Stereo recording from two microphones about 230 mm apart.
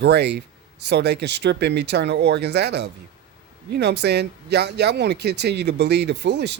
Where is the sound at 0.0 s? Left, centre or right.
Right.